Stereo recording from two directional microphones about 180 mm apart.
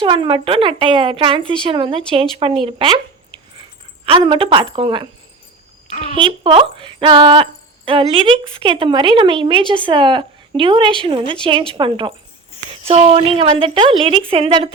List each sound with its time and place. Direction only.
0.0 s a woman's voice: 30° right (ahead or behind)
4.0 s a woman's voice: 30° right (ahead or behind)
5.9 s a woman's voice: 40° left (ahead or behind)
6.1 s a woman's voice: 30° right (ahead or behind)